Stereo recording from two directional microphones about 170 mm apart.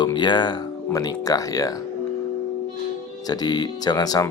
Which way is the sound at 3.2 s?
25° left (ahead or behind).